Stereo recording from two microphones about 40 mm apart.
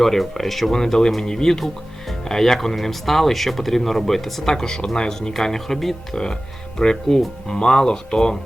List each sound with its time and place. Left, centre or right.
0.0 s speech: centre